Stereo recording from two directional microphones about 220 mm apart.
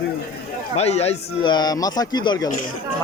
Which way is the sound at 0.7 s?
30° left (ahead or behind).